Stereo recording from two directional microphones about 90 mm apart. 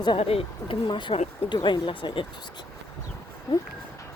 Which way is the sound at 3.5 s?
55° left (ahead or behind).